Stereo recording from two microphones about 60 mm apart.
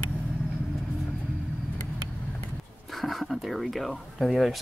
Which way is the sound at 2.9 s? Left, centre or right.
Centre.